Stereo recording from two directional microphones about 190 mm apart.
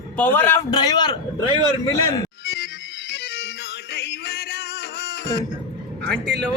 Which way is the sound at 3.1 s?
60° left (ahead or behind).